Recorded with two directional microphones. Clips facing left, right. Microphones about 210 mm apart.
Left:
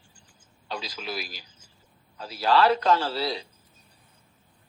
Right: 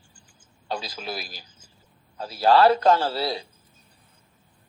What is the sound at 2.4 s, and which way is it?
Speech, 45° right (ahead or behind).